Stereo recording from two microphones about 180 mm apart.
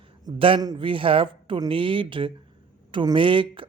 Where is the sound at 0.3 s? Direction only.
30° right (ahead or behind).